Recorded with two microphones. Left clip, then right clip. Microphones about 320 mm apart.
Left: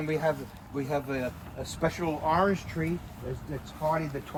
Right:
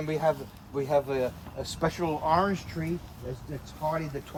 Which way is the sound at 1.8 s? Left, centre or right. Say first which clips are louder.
Right 1 dB; right.